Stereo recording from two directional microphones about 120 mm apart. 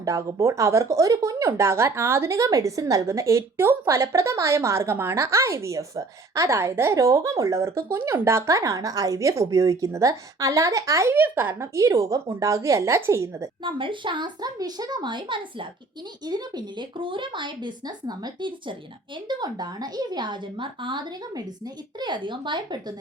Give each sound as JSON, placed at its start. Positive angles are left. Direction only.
{"t": 0.0, "sound": "speech", "side_deg": -25}
{"t": 13.7, "sound": "speech", "side_deg": -45}